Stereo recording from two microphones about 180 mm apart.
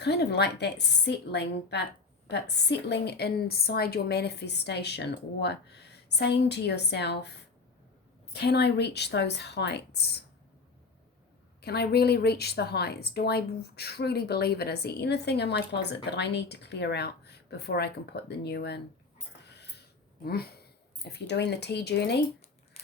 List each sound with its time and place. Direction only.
0.0 s a woman's voice: 65° left (ahead or behind)
11.6 s a woman's voice: 65° left (ahead or behind)
19.5 s a sound: 70° left (ahead or behind)